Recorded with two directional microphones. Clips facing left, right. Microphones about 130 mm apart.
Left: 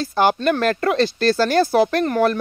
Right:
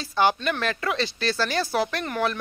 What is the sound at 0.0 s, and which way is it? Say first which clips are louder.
Speech: left 5 dB; 45° left (ahead or behind).